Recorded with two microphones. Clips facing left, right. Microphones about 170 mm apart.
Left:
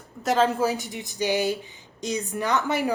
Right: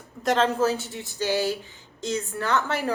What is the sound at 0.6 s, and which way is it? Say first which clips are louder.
Speech: right 1 dB; 15° left (ahead or behind).